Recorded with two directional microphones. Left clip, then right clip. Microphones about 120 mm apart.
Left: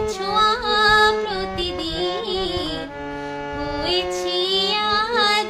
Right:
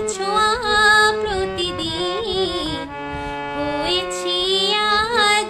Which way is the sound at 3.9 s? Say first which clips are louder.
Right 1 dB; 30° right (ahead or behind).